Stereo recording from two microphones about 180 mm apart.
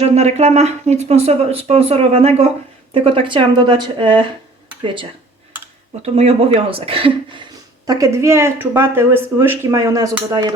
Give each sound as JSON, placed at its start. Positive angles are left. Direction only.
{"t": 0.0, "sound": "speech", "side_deg": -35}
{"t": 6.0, "sound": "speech", "side_deg": -35}
{"t": 7.9, "sound": "speech", "side_deg": -20}